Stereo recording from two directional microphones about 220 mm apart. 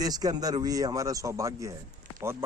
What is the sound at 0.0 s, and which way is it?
Speech, 15° right (ahead or behind).